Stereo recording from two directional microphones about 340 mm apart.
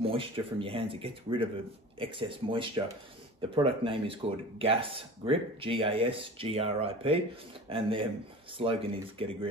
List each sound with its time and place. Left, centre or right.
0.0 s speech: centre